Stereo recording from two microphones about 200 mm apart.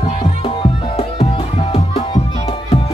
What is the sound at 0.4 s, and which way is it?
Music, 30° left (ahead or behind).